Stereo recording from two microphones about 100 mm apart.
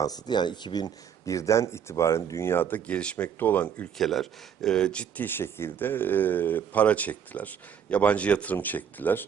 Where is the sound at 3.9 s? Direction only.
Centre (ahead or behind).